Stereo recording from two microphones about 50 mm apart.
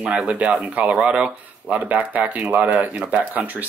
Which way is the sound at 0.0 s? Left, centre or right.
Right.